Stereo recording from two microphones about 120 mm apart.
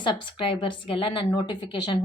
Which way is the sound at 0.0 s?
45° left (ahead or behind).